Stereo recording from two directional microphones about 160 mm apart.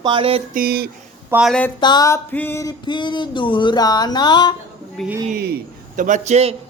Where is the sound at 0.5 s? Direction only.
70° right (ahead or behind).